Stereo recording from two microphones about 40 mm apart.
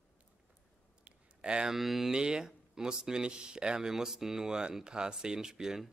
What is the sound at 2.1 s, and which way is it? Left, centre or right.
Speech, centre.